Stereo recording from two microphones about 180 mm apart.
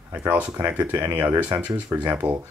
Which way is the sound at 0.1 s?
10° right (ahead or behind).